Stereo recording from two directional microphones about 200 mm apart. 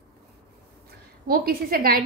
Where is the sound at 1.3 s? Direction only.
45° right (ahead or behind).